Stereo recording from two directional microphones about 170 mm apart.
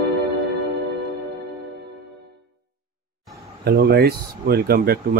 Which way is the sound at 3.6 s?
65° right (ahead or behind).